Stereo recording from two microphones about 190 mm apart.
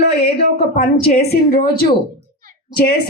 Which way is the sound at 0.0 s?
60° left (ahead or behind).